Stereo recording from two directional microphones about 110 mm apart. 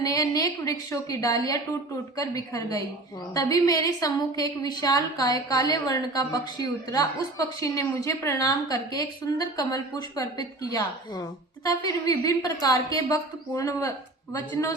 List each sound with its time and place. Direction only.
0.0 s a woman's voice: 35° left (ahead or behind)